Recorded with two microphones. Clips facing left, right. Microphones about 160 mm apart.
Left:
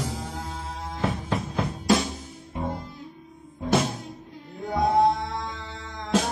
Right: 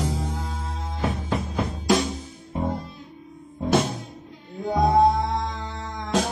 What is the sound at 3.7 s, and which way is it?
Music, centre (ahead or behind).